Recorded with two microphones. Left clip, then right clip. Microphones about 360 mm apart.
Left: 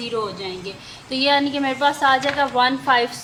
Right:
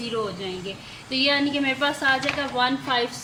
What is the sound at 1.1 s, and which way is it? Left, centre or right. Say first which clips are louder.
A woman's voice: left 3 dB; centre.